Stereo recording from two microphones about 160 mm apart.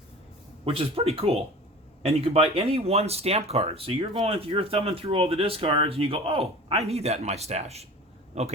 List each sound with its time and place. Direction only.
0.6 s a man's voice: 35° right (ahead or behind)